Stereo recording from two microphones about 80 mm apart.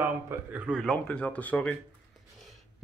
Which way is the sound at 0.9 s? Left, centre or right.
Centre.